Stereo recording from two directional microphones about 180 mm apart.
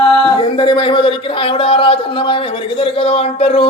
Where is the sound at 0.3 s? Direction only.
25° left (ahead or behind).